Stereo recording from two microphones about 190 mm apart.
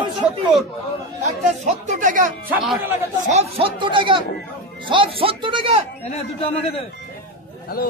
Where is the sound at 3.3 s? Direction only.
35° right (ahead or behind).